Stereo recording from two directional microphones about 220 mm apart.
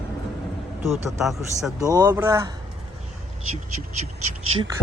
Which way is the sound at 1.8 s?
15° right (ahead or behind).